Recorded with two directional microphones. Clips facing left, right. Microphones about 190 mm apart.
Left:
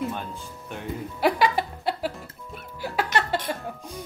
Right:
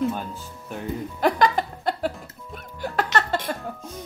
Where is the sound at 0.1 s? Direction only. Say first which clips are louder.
Right 2 dB; 5° right (ahead or behind).